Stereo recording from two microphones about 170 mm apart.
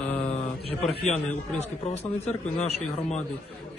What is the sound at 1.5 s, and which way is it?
Speech, 40° left (ahead or behind).